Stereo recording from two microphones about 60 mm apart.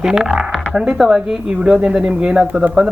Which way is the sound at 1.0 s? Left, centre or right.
Centre.